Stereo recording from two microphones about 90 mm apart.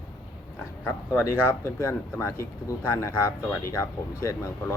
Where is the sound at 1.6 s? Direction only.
30° left (ahead or behind).